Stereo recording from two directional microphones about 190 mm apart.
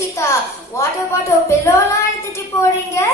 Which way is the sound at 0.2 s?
15° left (ahead or behind).